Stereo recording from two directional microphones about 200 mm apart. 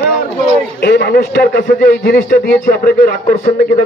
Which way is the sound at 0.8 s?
55° left (ahead or behind).